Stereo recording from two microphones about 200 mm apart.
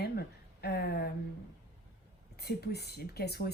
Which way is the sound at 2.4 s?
55° left (ahead or behind).